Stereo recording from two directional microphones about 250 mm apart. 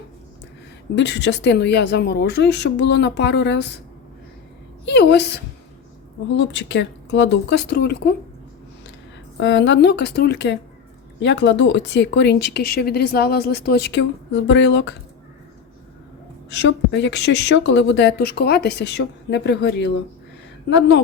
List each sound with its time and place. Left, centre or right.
0.9 s speech: left
4.9 s speech: left
9.4 s speech: left
16.5 s speech: left